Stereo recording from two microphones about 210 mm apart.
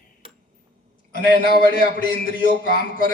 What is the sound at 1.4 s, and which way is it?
Speech, 50° right (ahead or behind).